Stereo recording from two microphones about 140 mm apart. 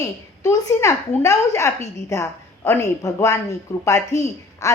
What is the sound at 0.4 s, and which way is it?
A woman's voice, 20° left (ahead or behind).